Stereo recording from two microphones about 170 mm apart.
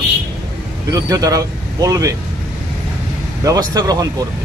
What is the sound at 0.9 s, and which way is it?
Speech, 20° right (ahead or behind).